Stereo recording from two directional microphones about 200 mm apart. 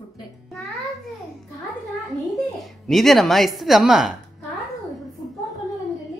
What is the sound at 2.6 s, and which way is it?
Speech, centre (ahead or behind).